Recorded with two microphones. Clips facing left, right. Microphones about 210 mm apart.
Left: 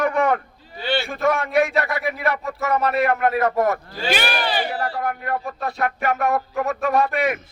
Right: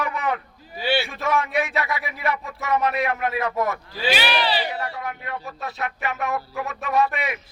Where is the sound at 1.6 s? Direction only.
55° left (ahead or behind).